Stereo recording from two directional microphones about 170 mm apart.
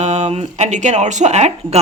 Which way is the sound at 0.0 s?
40° right (ahead or behind).